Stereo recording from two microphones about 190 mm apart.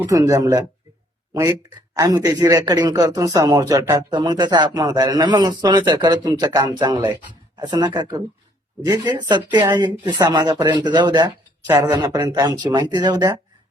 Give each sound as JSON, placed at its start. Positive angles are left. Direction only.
{"t": 0.0, "sound": "speech", "side_deg": -15}